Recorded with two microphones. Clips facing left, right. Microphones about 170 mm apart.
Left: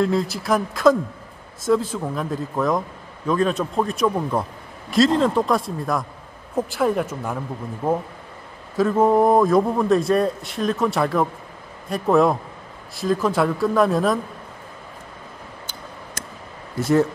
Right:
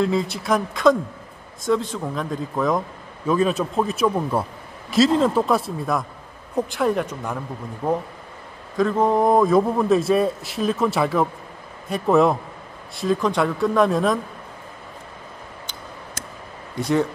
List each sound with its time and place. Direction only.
0.0 s a man's voice: centre (ahead or behind)
7.8 s speech: 15° left (ahead or behind)
8.7 s a man's voice: 5° left (ahead or behind)
16.7 s a man's voice: 5° left (ahead or behind)